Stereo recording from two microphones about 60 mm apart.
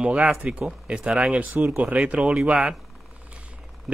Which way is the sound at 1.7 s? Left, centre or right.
Right.